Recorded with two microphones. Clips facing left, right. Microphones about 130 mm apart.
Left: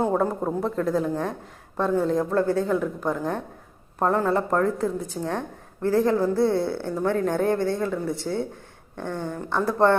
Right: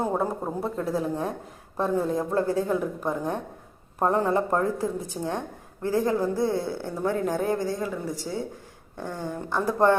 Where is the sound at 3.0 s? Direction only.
25° right (ahead or behind).